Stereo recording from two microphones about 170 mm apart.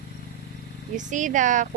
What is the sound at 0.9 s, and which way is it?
Speech, 45° right (ahead or behind).